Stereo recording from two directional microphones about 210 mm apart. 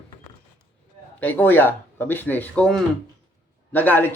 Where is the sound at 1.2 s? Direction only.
10° left (ahead or behind).